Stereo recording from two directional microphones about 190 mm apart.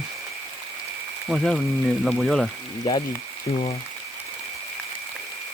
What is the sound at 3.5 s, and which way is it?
Speech, 30° left (ahead or behind).